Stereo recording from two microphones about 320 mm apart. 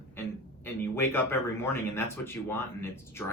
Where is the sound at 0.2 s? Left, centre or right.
Centre.